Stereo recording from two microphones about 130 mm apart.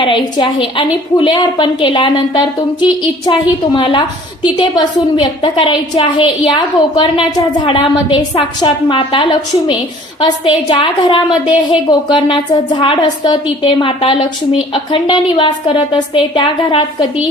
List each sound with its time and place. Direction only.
0.0 s a woman's voice: 40° left (ahead or behind)